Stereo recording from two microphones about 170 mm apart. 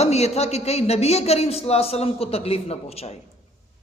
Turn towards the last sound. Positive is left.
turn(degrees=35)  # may be behind; listen again after turning